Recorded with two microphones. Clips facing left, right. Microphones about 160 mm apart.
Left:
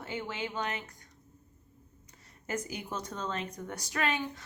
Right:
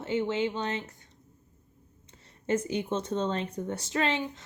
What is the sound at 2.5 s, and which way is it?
A woman's voice, 30° right (ahead or behind).